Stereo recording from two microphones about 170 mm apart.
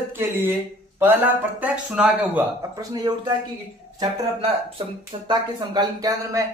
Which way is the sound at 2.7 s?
25° right (ahead or behind).